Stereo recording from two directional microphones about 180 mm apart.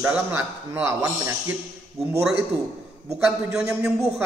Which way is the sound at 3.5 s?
5° right (ahead or behind).